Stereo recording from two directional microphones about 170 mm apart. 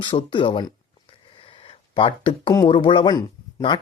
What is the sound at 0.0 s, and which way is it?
Speech, 30° left (ahead or behind).